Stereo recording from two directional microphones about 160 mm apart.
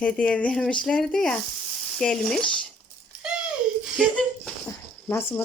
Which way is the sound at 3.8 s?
Centre (ahead or behind).